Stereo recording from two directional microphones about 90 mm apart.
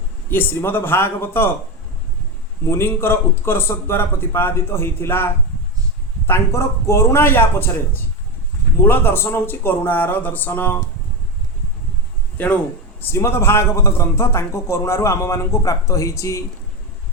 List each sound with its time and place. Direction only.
0.3 s a man's voice: 25° left (ahead or behind)
2.6 s a man's voice: 25° left (ahead or behind)
13.0 s a man's voice: 25° left (ahead or behind)